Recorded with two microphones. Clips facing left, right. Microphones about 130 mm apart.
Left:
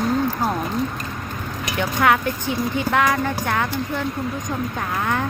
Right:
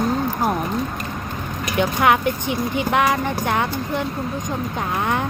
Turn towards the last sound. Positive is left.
turn(degrees=-20)  # may be behind; listen again after turning